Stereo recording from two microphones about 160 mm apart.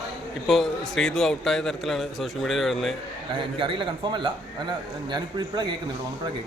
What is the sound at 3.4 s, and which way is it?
A man's voice, 30° right (ahead or behind).